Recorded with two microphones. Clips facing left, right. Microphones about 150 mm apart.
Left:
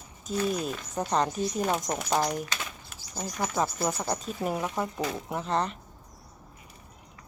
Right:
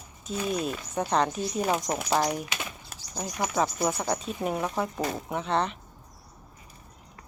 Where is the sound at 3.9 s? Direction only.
Centre (ahead or behind).